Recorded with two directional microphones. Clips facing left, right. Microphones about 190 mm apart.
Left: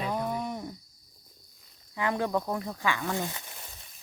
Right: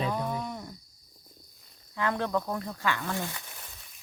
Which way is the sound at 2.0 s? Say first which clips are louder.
Left 1 dB; 15° left (ahead or behind).